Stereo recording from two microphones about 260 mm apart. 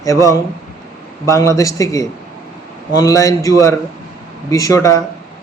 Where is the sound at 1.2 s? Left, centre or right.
Centre.